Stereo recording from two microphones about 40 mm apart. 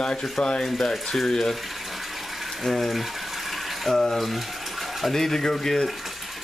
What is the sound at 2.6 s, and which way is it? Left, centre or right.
Speech, centre.